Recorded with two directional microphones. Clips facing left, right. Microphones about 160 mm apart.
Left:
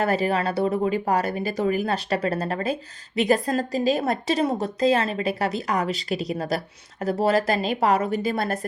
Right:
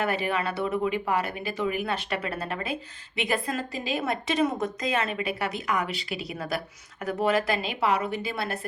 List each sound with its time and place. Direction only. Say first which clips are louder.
0.0 s a woman's voice: left 5 dB; 40° left (ahead or behind)